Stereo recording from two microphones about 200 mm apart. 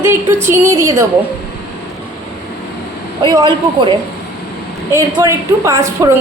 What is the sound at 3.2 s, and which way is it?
A woman's voice, 20° right (ahead or behind).